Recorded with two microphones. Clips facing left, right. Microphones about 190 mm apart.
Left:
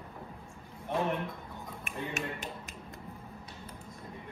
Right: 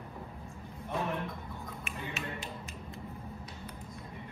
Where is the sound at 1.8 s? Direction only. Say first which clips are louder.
Left 5 dB; 50° left (ahead or behind).